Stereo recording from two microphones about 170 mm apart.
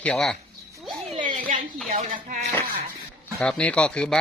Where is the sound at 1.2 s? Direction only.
50° right (ahead or behind).